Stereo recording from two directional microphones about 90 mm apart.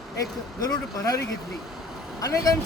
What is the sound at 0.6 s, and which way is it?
Speech, 40° left (ahead or behind).